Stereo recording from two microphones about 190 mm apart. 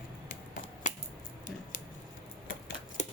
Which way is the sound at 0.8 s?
40° left (ahead or behind).